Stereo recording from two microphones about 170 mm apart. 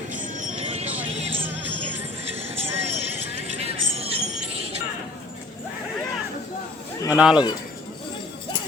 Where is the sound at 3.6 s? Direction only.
35° right (ahead or behind).